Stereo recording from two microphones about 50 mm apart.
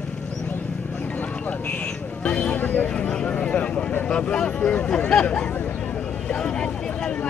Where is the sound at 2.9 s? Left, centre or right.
Centre.